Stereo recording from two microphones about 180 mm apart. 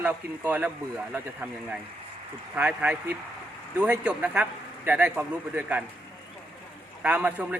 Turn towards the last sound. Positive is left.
turn(degrees=-10)  # may be behind; listen again after turning